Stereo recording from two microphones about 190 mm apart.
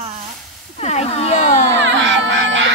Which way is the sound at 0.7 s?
35° left (ahead or behind).